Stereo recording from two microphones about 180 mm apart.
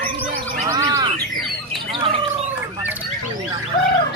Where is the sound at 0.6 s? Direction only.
20° right (ahead or behind).